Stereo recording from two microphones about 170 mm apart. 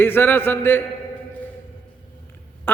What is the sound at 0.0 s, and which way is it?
Speech, 10° left (ahead or behind).